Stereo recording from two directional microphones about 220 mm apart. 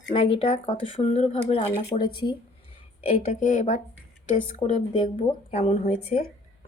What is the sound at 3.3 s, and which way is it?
A woman's voice, 35° left (ahead or behind).